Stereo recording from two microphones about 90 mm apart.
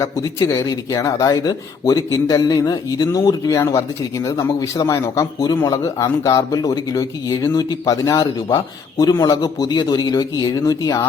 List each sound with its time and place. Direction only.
0.0 s speech: 35° left (ahead or behind)